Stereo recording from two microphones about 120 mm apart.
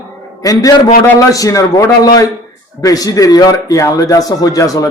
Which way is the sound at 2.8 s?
30° left (ahead or behind).